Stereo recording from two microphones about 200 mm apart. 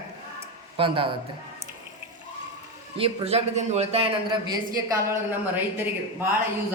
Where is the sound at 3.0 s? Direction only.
30° right (ahead or behind).